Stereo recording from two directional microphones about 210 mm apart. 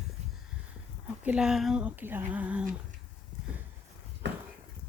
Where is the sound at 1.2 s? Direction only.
5° right (ahead or behind).